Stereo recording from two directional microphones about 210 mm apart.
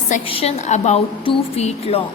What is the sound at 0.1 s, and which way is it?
A woman's voice, 30° left (ahead or behind).